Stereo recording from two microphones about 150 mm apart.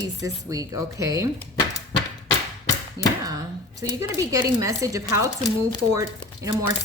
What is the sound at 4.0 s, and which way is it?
Speech, 20° right (ahead or behind).